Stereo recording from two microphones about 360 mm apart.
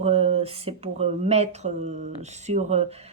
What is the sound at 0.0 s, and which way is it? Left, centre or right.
Speech, centre.